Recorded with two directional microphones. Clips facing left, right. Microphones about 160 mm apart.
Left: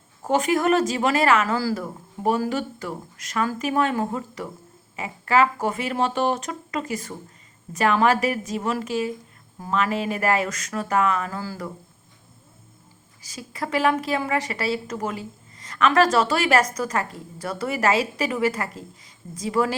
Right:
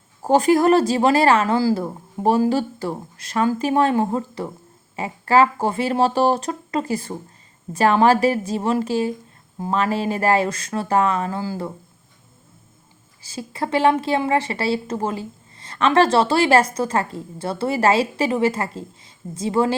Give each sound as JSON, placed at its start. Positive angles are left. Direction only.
{"t": 0.2, "sound": "a woman's voice", "side_deg": -35}
{"t": 13.2, "sound": "a woman's voice", "side_deg": -30}